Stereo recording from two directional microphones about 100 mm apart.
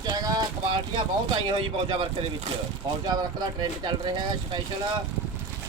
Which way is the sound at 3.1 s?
45° right (ahead or behind).